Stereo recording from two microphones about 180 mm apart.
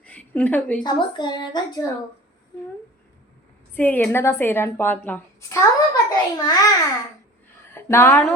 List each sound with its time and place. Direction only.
0.0 s a sound: 10° left (ahead or behind)
0.9 s a woman's voice: 25° left (ahead or behind)
3.8 s a woman's voice: 10° left (ahead or behind)